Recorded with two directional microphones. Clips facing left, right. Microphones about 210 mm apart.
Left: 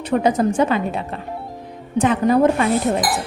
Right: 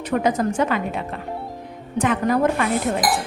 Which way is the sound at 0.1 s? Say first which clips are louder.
Left 3 dB; 30° left (ahead or behind).